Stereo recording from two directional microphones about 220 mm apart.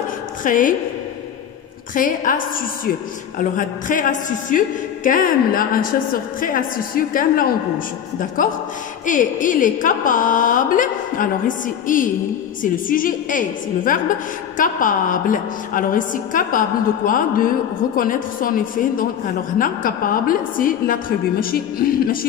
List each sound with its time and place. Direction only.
0.4 s a woman's voice: 35° left (ahead or behind)
2.0 s a woman's voice: 40° left (ahead or behind)